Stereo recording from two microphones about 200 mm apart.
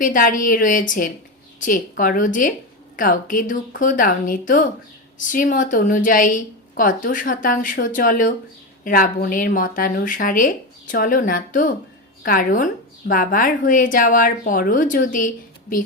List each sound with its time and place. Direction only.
0.0 s a woman's voice: 45° left (ahead or behind)